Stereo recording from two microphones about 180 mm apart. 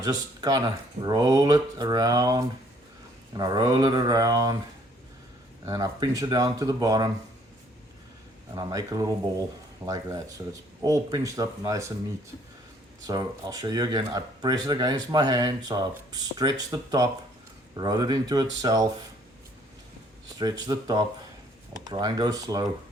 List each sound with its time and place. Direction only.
0.0 s speech: 20° right (ahead or behind)
5.6 s speech: 20° right (ahead or behind)
8.5 s speech: 20° right (ahead or behind)
13.1 s speech: 20° right (ahead or behind)
20.4 s speech: 20° right (ahead or behind)